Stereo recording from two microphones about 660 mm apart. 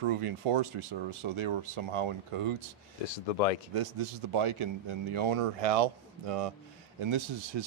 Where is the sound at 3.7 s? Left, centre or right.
Right.